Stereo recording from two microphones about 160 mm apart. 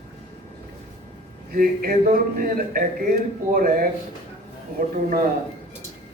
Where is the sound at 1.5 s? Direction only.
65° right (ahead or behind).